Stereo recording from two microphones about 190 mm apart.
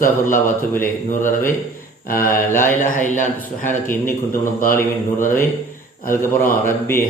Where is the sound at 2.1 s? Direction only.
10° left (ahead or behind).